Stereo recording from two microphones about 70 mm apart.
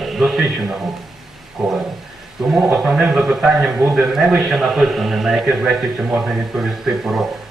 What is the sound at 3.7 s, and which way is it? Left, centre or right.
A man's voice, right.